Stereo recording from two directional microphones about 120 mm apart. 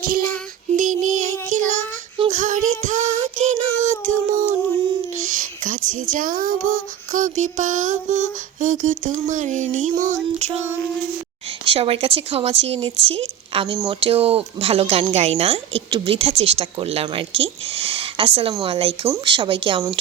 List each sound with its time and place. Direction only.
0.7 s child singing: 90° right
5.1 s speech: 90° right
10.0 s a sound: 75° right (ahead or behind)
11.6 s speech: 50° right (ahead or behind)